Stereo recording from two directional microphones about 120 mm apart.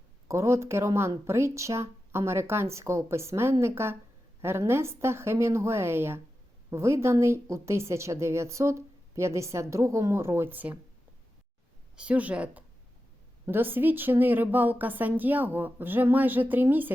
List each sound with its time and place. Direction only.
0.3 s a woman's voice: 25° right (ahead or behind)
11.9 s a woman's voice: 10° right (ahead or behind)